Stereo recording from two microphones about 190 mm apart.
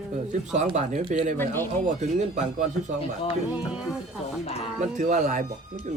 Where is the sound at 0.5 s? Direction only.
40° right (ahead or behind).